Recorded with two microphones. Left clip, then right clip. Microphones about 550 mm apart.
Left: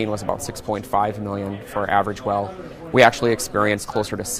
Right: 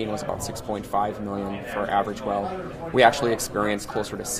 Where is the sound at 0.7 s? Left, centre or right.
Left.